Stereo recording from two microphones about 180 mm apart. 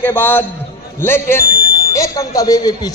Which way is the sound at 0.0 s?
10° left (ahead or behind).